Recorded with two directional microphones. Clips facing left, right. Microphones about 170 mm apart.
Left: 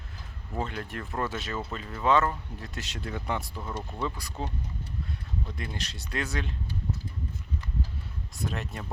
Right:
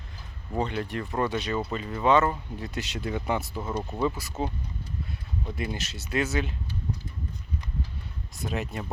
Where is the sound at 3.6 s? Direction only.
20° right (ahead or behind).